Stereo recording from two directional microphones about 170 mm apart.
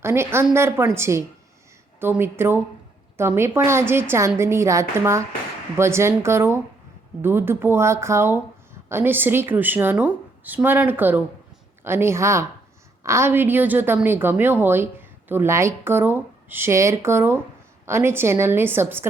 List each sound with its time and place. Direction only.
0.0 s a woman's voice: 15° right (ahead or behind)